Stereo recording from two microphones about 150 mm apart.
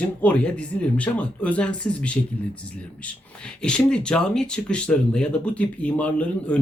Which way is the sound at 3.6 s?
5° left (ahead or behind).